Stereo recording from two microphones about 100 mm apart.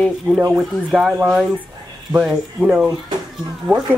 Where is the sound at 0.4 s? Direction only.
20° right (ahead or behind).